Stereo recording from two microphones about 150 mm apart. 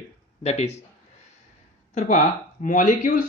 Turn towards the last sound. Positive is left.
turn(degrees=60)  # may be behind; listen again after turning